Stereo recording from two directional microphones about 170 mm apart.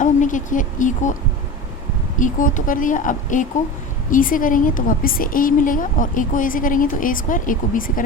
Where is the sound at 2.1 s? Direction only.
50° left (ahead or behind).